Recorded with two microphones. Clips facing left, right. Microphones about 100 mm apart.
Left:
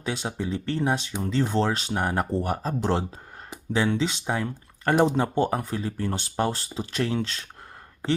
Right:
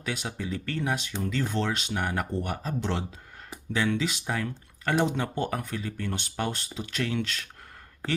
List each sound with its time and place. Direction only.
0.0 s speech: 30° left (ahead or behind)